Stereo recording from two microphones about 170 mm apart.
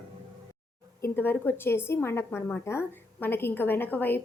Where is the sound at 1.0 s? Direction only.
10° left (ahead or behind).